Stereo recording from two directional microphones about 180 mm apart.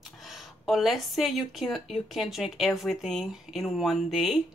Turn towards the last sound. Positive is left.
turn(degrees=0)  # may be behind; listen again after turning